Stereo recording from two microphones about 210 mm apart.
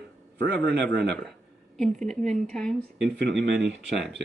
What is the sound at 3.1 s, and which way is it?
Speech, 55° right (ahead or behind).